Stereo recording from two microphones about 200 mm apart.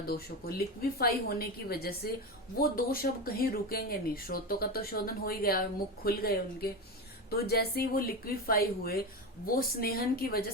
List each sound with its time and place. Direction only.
0.0 s speech: 50° left (ahead or behind)